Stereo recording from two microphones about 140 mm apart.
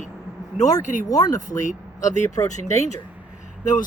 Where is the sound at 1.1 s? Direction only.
25° left (ahead or behind).